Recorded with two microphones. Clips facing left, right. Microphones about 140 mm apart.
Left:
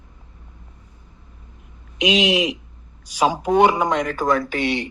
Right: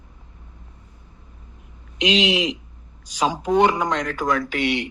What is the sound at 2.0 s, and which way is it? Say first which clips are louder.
Speech: left 2 dB; 10° left (ahead or behind).